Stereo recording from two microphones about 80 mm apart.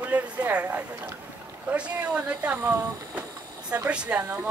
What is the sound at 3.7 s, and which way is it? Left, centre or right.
Speech, centre.